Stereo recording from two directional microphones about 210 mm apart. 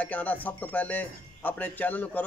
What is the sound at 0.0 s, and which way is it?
A man's voice, 5° left (ahead or behind).